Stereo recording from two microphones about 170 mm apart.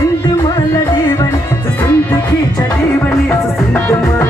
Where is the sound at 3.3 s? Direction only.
10° left (ahead or behind).